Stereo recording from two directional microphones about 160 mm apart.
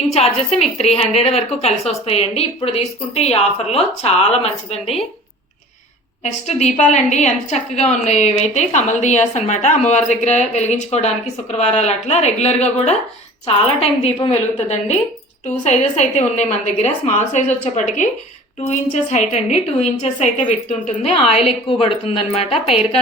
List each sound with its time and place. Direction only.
0.1 s a woman's voice: 40° left (ahead or behind)
6.2 s a woman's voice: 45° left (ahead or behind)
19.1 s a woman's voice: 45° left (ahead or behind)